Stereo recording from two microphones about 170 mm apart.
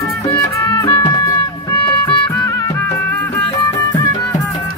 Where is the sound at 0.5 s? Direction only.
20° left (ahead or behind).